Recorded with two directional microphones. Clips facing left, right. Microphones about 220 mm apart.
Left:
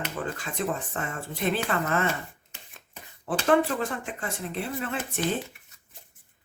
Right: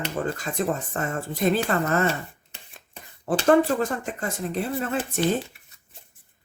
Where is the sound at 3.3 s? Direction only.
40° right (ahead or behind).